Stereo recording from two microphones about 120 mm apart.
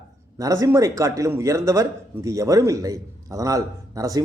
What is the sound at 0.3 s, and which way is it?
Speech, 30° right (ahead or behind).